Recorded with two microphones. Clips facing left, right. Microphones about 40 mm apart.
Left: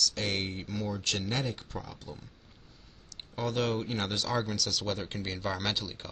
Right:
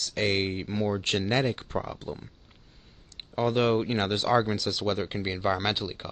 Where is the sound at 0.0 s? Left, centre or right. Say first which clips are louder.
Right 5 dB; right.